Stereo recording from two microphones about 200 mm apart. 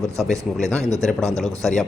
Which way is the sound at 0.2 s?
Centre (ahead or behind).